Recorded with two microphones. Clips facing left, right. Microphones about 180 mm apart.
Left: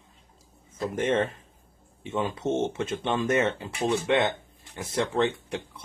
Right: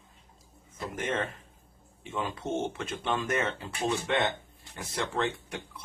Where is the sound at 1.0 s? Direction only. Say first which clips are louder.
Left 7 dB; 30° left (ahead or behind).